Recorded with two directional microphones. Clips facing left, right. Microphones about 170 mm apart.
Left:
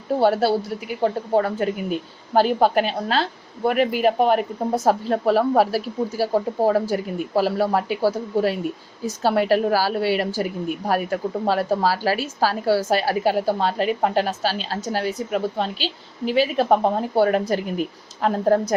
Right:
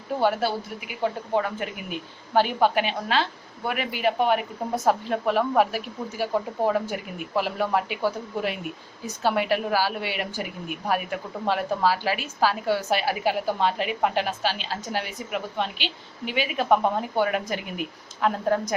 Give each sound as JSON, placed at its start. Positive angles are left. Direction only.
{"t": 0.2, "sound": "speech", "side_deg": 35}